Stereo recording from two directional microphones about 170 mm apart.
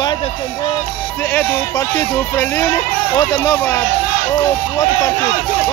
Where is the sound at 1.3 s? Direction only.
15° left (ahead or behind).